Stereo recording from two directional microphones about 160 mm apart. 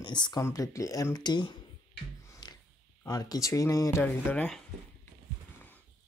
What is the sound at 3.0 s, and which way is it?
Speech, 20° left (ahead or behind).